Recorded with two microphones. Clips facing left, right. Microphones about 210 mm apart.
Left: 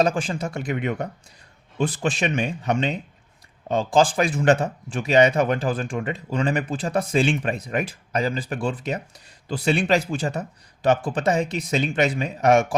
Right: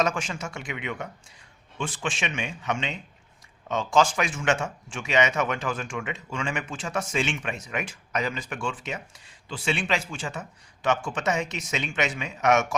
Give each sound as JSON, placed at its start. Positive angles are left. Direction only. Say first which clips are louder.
{"t": 0.0, "sound": "a man's voice", "louder": "left 5 dB", "side_deg": 35}